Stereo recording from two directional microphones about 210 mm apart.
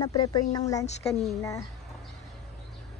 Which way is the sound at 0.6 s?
15° left (ahead or behind).